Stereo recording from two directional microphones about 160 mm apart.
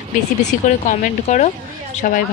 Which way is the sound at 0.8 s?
50° left (ahead or behind).